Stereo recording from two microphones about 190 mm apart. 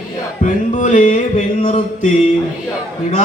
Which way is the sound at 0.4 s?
40° left (ahead or behind).